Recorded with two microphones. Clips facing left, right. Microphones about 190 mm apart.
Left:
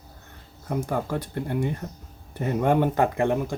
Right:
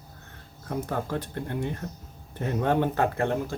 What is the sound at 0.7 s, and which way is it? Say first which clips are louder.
Speech: left 3 dB; 10° left (ahead or behind).